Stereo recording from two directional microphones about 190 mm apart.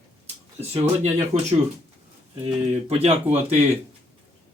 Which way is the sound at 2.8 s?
30° right (ahead or behind).